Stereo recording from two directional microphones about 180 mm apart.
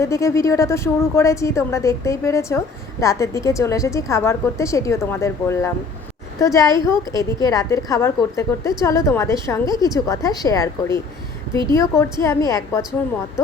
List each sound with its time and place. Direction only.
0.0 s a woman's voice: 15° left (ahead or behind)